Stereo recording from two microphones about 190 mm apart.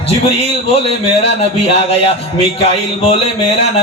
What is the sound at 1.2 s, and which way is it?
Speech, 30° left (ahead or behind).